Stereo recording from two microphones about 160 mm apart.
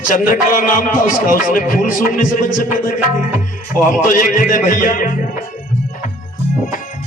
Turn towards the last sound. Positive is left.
turn(degrees=60)  # may be behind; listen again after turning